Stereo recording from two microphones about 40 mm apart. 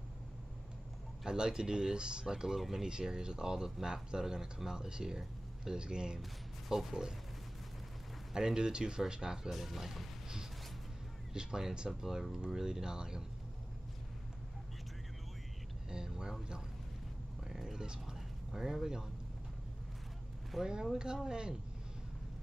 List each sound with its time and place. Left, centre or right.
1.2 s speech: centre
8.3 s speech: centre
9.5 s speech: centre
11.3 s speech: centre
11.9 s speech: centre
15.9 s speech: centre
17.5 s a sound: centre
18.5 s speech: centre
20.5 s speech: centre
21.3 s speech: right